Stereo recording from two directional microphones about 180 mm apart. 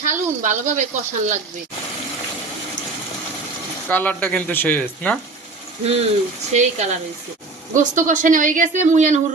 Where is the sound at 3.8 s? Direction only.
10° left (ahead or behind).